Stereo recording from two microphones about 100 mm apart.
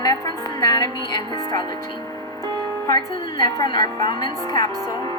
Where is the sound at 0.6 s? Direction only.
40° left (ahead or behind).